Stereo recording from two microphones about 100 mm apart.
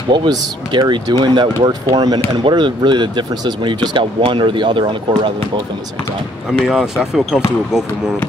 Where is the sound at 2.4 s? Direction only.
55° right (ahead or behind).